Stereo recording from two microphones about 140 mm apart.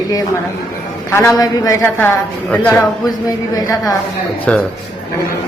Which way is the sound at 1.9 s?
15° left (ahead or behind).